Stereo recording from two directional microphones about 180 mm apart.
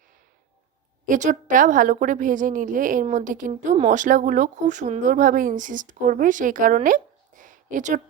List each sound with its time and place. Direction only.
1.0 s a woman's voice: 45° right (ahead or behind)